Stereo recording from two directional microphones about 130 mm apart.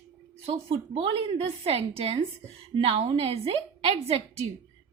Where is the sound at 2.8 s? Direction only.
50° right (ahead or behind).